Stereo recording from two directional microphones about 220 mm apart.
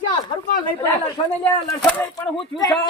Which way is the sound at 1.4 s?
10° left (ahead or behind).